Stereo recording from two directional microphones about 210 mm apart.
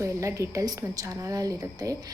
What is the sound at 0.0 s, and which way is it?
A woman's voice, 15° right (ahead or behind).